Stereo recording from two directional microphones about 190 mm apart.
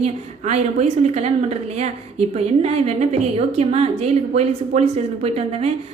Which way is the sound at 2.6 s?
35° right (ahead or behind).